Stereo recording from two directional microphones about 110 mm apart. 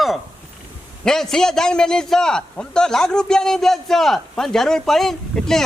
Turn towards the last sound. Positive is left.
turn(degrees=5)  # may be behind; listen again after turning